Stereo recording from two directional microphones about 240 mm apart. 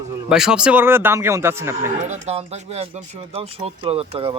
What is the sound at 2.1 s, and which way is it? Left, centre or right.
Speech, right.